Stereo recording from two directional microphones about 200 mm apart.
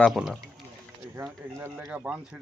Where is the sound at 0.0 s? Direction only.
Centre (ahead or behind).